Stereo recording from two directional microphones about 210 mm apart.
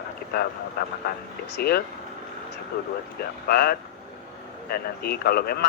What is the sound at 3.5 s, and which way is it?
A man's voice, 45° left (ahead or behind).